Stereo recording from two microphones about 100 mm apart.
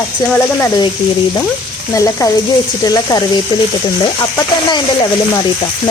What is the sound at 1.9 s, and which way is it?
A woman's voice, 35° left (ahead or behind).